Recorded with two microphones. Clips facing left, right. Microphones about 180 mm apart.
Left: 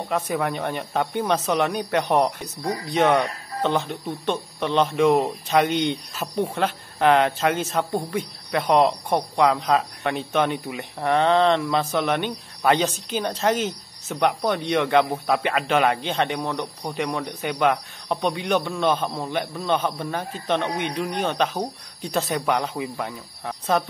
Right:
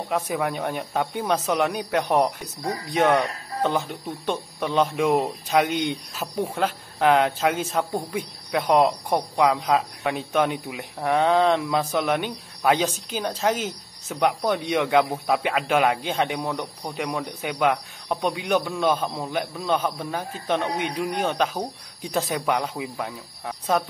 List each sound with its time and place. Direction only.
0.1 s speech: 5° right (ahead or behind)